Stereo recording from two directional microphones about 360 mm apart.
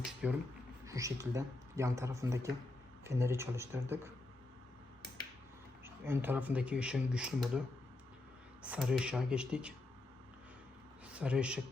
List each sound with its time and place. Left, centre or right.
0.0 s speech: centre
5.8 s speech: centre
8.6 s speech: centre
11.0 s a man's voice: centre